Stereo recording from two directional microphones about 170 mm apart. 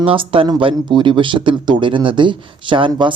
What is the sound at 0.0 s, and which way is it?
Speech, 30° right (ahead or behind).